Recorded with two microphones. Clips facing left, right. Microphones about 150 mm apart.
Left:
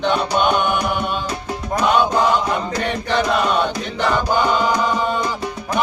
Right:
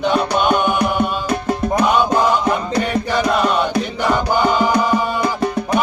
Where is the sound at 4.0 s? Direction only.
10° right (ahead or behind).